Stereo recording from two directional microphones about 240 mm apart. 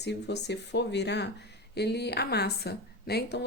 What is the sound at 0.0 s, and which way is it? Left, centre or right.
Speech, left.